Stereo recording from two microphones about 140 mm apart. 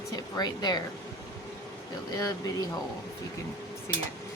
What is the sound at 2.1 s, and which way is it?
Speech, 25° left (ahead or behind).